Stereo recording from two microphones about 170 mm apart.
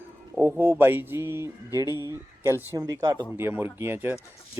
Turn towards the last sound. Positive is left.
turn(degrees=-10)  # may be behind; listen again after turning